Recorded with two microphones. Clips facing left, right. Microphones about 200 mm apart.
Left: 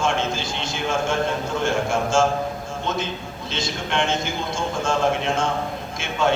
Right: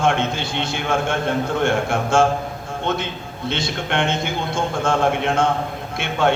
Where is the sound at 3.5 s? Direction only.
60° right (ahead or behind).